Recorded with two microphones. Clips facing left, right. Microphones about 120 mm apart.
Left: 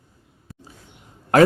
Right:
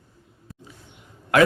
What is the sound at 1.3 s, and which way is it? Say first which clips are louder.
Speech: left 4 dB; 40° left (ahead or behind).